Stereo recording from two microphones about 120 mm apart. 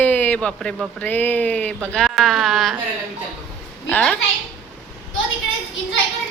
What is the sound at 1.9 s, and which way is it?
Speech, centre (ahead or behind).